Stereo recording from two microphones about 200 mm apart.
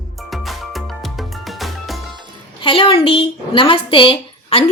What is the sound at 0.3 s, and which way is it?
Music, centre (ahead or behind).